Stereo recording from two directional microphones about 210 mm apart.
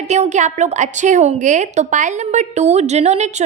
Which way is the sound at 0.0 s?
35° right (ahead or behind).